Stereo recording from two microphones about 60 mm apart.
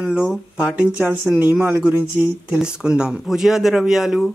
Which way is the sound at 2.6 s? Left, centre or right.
Centre.